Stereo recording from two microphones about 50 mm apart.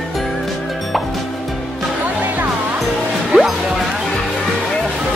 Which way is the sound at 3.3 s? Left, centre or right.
Right.